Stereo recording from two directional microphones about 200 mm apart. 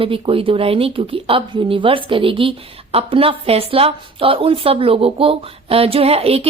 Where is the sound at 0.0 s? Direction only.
25° right (ahead or behind).